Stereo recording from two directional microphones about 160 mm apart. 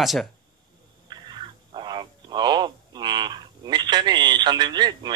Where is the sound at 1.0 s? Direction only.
30° right (ahead or behind).